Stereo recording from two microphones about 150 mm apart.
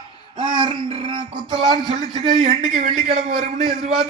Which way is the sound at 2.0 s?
30° right (ahead or behind).